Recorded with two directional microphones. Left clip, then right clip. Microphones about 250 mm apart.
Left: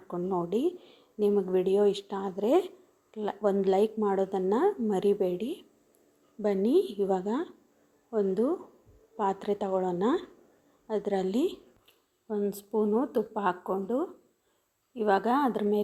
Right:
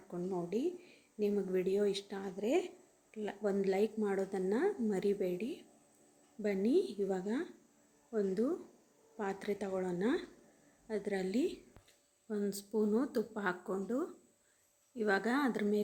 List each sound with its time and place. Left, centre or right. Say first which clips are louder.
0.1 s speech: left 8 dB; centre